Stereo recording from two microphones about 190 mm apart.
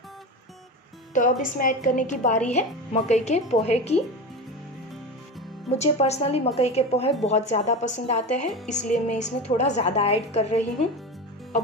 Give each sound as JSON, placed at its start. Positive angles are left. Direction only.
{"t": 1.1, "sound": "a woman's voice", "side_deg": 45}
{"t": 5.7, "sound": "a woman's voice", "side_deg": 35}